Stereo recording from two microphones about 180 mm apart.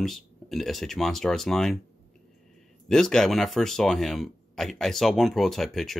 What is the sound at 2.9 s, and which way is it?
Speech, 5° left (ahead or behind).